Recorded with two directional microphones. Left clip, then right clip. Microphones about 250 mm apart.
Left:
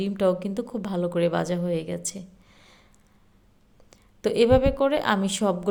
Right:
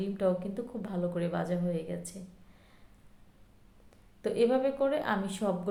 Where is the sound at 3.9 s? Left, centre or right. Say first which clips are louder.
Left 8 dB; left.